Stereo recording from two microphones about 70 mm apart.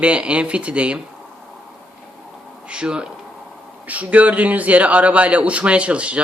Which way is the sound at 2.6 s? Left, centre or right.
Centre.